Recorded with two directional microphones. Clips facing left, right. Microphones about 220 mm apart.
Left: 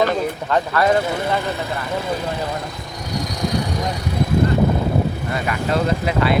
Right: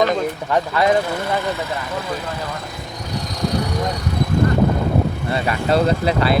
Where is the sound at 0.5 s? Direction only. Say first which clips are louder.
Even; 15° right (ahead or behind).